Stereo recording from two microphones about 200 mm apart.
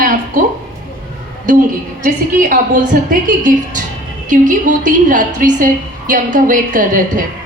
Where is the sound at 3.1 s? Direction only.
40° right (ahead or behind).